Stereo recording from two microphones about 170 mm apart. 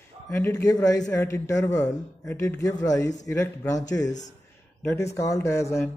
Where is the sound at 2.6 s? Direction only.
20° left (ahead or behind).